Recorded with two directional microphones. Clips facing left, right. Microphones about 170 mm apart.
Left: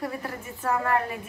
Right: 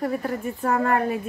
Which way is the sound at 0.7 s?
45° right (ahead or behind).